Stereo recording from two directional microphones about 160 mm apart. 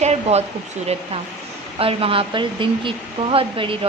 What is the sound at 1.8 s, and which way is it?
A woman's voice, 35° right (ahead or behind).